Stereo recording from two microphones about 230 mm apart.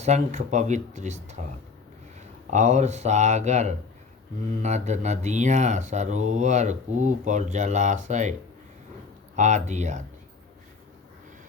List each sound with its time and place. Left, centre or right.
0.0 s speech: right
2.5 s speech: right